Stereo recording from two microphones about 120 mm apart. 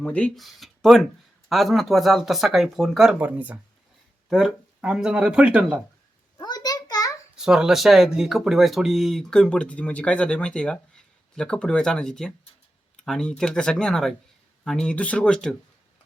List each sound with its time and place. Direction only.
0.0 s speech: 10° left (ahead or behind); by 5.8 s 10° right (ahead or behind)
6.3 s a sound: 35° left (ahead or behind)
7.3 s speech: 5° right (ahead or behind)